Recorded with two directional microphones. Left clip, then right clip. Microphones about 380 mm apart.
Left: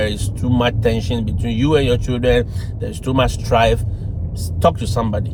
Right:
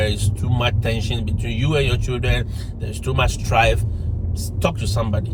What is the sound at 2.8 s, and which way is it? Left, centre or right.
Speech, centre.